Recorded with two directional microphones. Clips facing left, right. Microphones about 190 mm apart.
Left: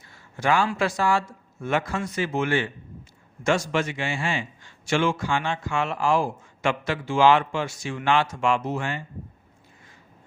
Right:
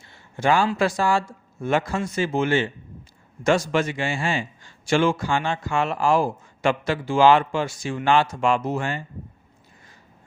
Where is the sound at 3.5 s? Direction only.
40° right (ahead or behind).